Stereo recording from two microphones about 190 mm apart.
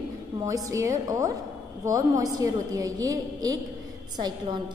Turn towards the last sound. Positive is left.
turn(degrees=-20)  # may be behind; listen again after turning